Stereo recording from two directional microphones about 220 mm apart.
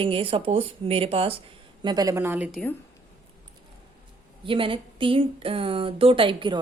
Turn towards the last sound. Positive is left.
turn(degrees=-20)  # may be behind; listen again after turning